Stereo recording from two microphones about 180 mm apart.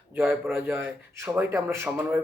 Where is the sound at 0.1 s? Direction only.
10° right (ahead or behind).